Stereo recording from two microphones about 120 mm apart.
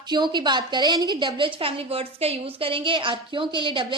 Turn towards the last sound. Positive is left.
turn(degrees=-45)  # may be behind; listen again after turning